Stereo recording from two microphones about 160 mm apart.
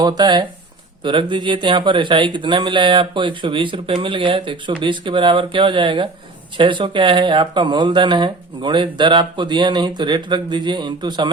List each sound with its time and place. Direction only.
0.0 s speech: 25° right (ahead or behind)